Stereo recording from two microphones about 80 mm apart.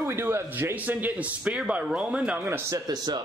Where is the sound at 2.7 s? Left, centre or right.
Right.